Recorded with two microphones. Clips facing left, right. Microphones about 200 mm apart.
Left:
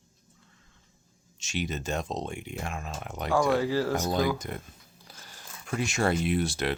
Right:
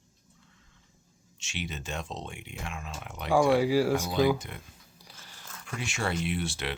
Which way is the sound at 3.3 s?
10° right (ahead or behind).